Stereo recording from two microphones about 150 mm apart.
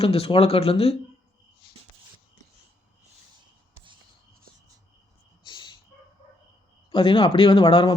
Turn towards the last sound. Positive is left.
turn(degrees=35)  # may be behind; listen again after turning